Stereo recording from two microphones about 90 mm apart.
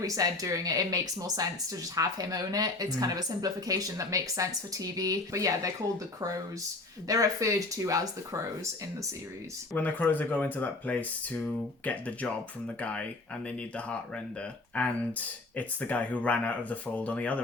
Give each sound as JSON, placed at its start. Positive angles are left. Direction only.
{"t": 0.0, "sound": "speech", "side_deg": -40}
{"t": 7.1, "sound": "speech", "side_deg": -40}
{"t": 9.7, "sound": "speech", "side_deg": 20}